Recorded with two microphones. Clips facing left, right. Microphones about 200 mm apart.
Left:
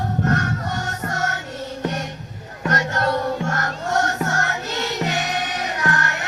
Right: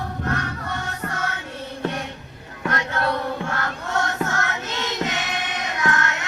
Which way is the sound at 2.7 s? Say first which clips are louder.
Left 3 dB; 45° left (ahead or behind).